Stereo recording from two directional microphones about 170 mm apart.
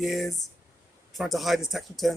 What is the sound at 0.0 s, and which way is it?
Speech, centre (ahead or behind).